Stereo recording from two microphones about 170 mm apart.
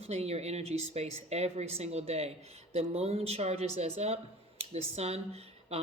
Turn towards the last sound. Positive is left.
turn(degrees=-40)  # may be behind; listen again after turning